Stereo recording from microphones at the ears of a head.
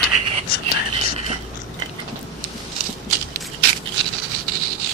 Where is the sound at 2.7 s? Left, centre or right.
Right.